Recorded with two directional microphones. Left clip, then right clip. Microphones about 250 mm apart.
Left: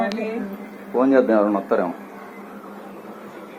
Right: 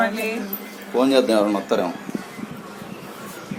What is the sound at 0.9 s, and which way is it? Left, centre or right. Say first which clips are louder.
Speech: left 1 dB; right.